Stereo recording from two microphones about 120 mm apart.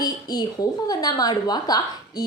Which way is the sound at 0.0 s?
35° left (ahead or behind).